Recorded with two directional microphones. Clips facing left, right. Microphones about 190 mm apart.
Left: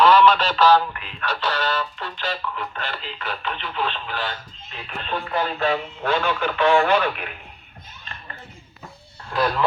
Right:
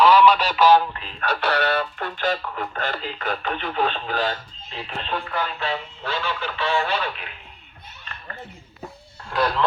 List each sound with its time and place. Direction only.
0.0 s radio: 10° right (ahead or behind)
1.2 s speech: 60° right (ahead or behind); by 4.4 s 40° right (ahead or behind)
5.3 s speech: 25° left (ahead or behind)
5.5 s speech: 50° left (ahead or behind)
9.3 s speech: 5° left (ahead or behind)